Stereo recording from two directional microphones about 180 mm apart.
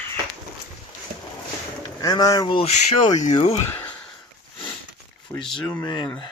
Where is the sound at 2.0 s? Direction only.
20° left (ahead or behind).